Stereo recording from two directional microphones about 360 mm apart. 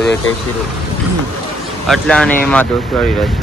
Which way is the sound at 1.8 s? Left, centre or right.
Centre.